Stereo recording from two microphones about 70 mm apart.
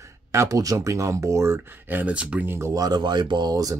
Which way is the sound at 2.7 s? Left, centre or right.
Right.